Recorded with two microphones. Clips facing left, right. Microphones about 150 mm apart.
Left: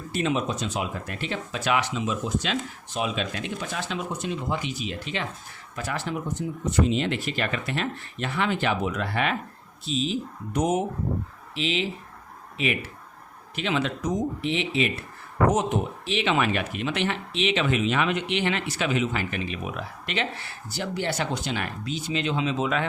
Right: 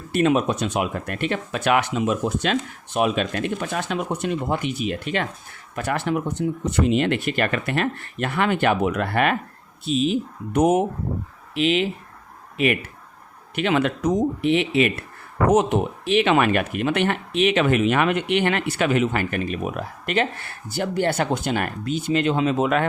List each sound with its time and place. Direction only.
0.1 s speech: 55° right (ahead or behind)